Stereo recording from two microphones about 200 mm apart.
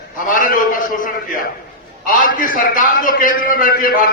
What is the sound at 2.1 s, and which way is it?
A man's voice, 40° left (ahead or behind).